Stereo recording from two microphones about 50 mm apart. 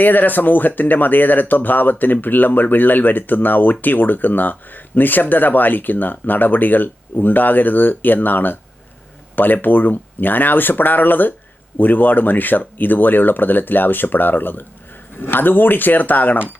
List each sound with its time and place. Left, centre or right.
0.0 s speech: left